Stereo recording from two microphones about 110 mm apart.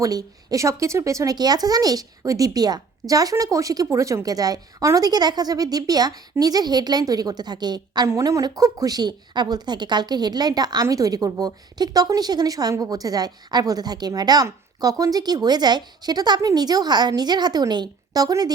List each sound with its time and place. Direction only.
0.0 s speech: 35° right (ahead or behind)
8.0 s speech: 25° right (ahead or behind)